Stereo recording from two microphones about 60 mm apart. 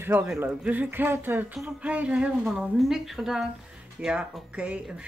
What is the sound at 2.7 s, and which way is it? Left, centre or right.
Speech, centre.